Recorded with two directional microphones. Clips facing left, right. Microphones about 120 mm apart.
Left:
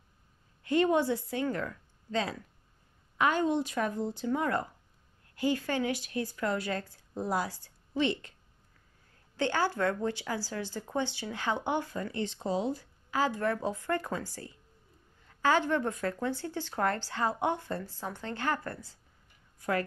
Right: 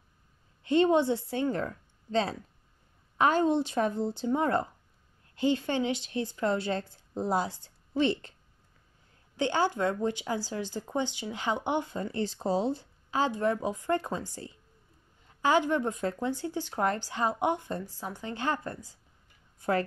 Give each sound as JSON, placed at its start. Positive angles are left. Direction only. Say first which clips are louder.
{"t": 0.7, "sound": "speech", "louder": "right 3 dB", "side_deg": -25}
{"t": 7.9, "sound": "a woman's voice", "louder": "right 3 dB", "side_deg": -35}
{"t": 9.4, "sound": "speech", "louder": "right 2 dB", "side_deg": -20}